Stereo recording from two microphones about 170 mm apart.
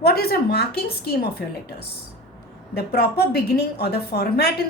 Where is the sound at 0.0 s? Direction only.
65° left (ahead or behind).